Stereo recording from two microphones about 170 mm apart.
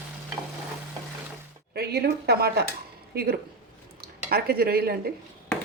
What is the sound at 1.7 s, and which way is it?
Speech, 70° right (ahead or behind).